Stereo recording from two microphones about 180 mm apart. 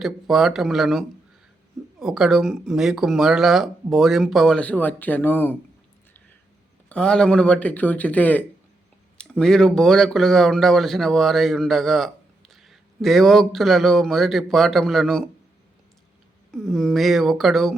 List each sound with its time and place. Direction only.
0.0 s speech: centre (ahead or behind)
6.8 s a man's voice: 5° left (ahead or behind)
16.5 s speech: 5° left (ahead or behind)